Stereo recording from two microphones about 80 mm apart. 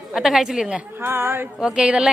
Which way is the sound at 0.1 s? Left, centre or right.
Centre.